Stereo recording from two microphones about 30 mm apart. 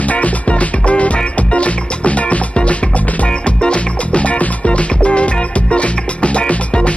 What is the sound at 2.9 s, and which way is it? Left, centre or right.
Music, left.